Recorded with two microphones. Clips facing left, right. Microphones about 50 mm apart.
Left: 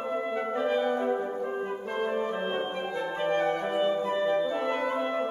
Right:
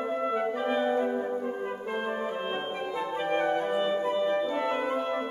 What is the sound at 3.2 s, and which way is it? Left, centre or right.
Clarinet, centre.